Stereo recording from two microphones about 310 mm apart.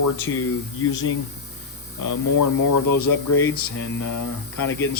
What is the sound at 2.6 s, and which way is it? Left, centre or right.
Speech, left.